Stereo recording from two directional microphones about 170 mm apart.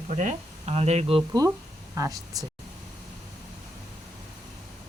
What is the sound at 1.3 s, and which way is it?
Speech, 15° right (ahead or behind).